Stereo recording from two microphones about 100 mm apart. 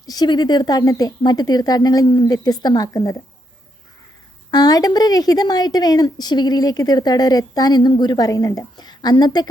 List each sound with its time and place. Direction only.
0.0 s a woman's voice: 40° left (ahead or behind)
4.5 s a woman's voice: 40° left (ahead or behind)